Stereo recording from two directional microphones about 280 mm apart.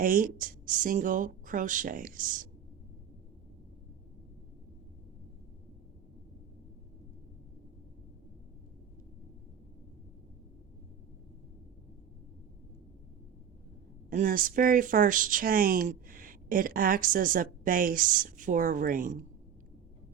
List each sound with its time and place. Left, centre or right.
0.0 s speech: right
14.1 s speech: right